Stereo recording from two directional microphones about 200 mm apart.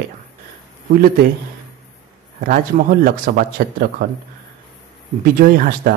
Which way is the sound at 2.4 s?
45° right (ahead or behind).